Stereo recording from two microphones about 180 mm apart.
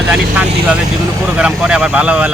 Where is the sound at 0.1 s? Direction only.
5° right (ahead or behind).